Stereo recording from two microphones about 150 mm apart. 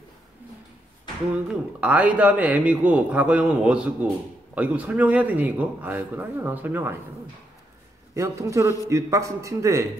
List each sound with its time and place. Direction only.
1.3 s a man's voice: 5° right (ahead or behind)
8.1 s a man's voice: 20° right (ahead or behind)